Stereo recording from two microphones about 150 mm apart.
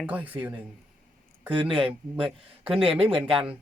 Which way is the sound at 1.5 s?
35° right (ahead or behind).